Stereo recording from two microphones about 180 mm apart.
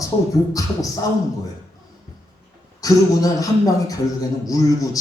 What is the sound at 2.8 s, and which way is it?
A man's voice, 20° left (ahead or behind).